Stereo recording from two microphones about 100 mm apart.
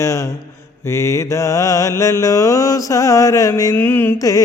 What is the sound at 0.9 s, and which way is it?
Mantra, 25° left (ahead or behind).